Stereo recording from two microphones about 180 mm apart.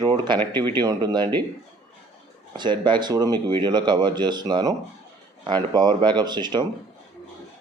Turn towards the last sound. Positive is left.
turn(degrees=-25)  # may be behind; listen again after turning